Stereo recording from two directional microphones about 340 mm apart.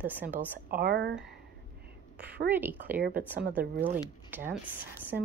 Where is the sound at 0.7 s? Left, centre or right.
Right.